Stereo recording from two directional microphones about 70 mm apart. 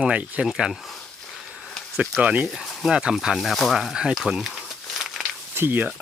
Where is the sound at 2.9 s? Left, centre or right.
Centre.